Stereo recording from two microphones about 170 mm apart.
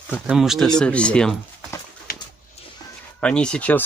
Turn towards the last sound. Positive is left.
turn(degrees=10)  # may be behind; listen again after turning